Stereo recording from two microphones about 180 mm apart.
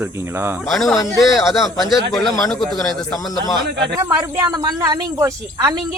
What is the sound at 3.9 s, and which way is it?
A woman's voice, 15° right (ahead or behind).